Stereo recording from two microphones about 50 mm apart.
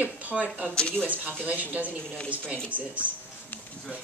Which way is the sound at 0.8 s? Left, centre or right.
Centre.